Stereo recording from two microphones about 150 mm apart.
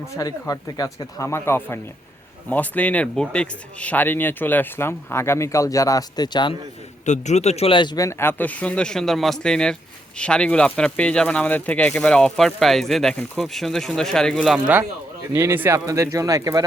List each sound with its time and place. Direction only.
0.2 s speech: 20° left (ahead or behind)
7.0 s a man's voice: 50° left (ahead or behind)
7.9 s speech: 20° left (ahead or behind); by 14.6 s 5° left (ahead or behind)
15.3 s speech: 15° right (ahead or behind)